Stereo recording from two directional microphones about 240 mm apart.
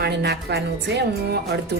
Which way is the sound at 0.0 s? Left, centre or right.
Right.